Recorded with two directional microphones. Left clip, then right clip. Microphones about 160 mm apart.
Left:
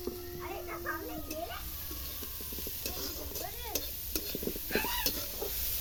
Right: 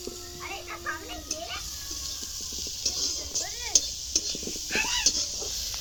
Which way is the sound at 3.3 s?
40° left (ahead or behind).